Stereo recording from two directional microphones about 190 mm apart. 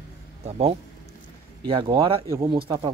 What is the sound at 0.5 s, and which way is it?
Speech, 35° right (ahead or behind).